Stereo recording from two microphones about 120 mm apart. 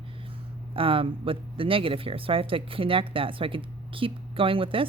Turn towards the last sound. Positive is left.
turn(degrees=-50)  # may be behind; listen again after turning